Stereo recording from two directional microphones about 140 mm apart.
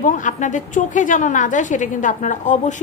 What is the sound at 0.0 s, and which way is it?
A woman's voice, 65° left (ahead or behind).